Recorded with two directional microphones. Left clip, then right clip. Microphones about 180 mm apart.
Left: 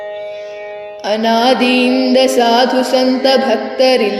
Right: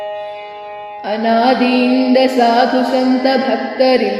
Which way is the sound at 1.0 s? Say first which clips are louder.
Left 1 dB; 40° left (ahead or behind).